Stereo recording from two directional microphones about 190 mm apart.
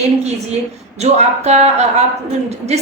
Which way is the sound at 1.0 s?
35° right (ahead or behind).